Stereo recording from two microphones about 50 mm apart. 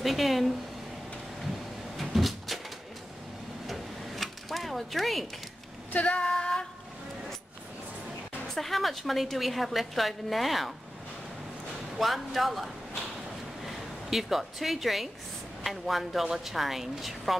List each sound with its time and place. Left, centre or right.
0.0 s a woman's voice: centre
2.0 s cupboard open or close: centre
3.6 s a sound: centre
5.9 s female singing: left
8.5 s a woman's voice: centre
12.0 s a woman's voice: centre